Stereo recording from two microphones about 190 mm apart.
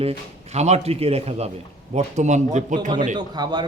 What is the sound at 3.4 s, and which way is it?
Speech, 20° right (ahead or behind).